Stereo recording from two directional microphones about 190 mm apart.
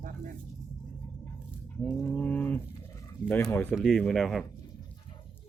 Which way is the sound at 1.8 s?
5° left (ahead or behind).